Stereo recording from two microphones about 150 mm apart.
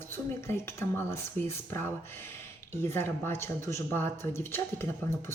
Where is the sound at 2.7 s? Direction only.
15° left (ahead or behind).